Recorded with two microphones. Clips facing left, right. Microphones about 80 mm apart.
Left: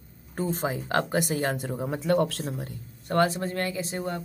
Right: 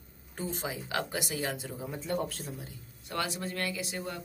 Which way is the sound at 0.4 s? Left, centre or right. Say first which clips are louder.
Left 8 dB; left.